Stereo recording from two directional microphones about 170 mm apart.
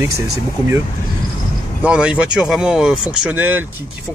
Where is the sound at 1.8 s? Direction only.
5° right (ahead or behind).